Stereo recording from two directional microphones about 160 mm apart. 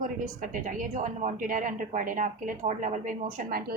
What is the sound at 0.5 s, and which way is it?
A woman's voice, 55° right (ahead or behind).